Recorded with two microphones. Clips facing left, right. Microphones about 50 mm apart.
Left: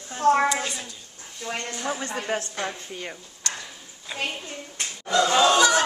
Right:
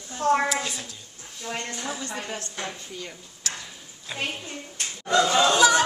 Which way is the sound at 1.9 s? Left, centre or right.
Left.